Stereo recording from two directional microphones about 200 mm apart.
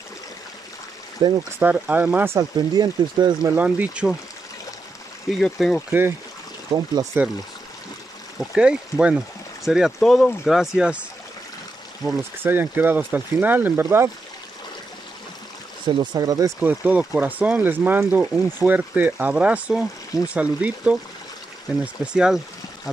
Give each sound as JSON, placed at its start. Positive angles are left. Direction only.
{"t": 1.2, "sound": "speech", "side_deg": -25}
{"t": 1.6, "sound": "speech", "side_deg": -10}
{"t": 3.5, "sound": "speech", "side_deg": -10}
{"t": 5.4, "sound": "speech", "side_deg": 0}
{"t": 5.9, "sound": "speech", "side_deg": -10}
{"t": 6.7, "sound": "speech", "side_deg": -20}
{"t": 7.2, "sound": "speech", "side_deg": -10}
{"t": 8.4, "sound": "speech", "side_deg": -5}
{"t": 12.0, "sound": "speech", "side_deg": -5}
{"t": 16.0, "sound": "speech", "side_deg": -20}